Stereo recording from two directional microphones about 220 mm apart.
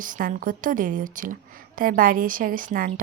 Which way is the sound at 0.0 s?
35° right (ahead or behind).